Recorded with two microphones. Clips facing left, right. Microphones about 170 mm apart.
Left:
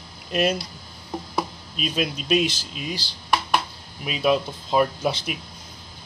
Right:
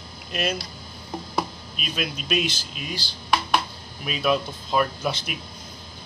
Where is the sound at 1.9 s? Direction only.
30° left (ahead or behind).